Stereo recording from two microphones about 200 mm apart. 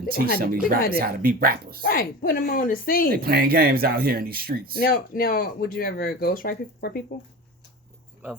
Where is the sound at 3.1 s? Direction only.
50° right (ahead or behind).